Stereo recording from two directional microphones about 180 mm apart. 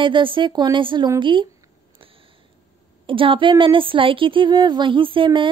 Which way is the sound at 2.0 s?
30° right (ahead or behind).